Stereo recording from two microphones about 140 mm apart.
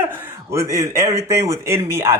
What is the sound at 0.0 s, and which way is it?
A man's voice, 15° right (ahead or behind).